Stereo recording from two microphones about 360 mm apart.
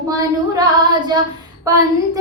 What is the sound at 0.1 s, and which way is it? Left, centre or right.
Child singing, centre.